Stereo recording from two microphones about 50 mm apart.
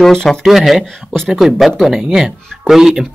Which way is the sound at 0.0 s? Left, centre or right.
Centre.